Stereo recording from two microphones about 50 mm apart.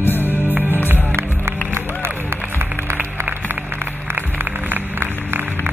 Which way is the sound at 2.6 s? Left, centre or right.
Right.